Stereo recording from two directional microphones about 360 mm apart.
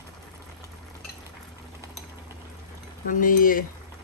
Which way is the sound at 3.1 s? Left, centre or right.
Left.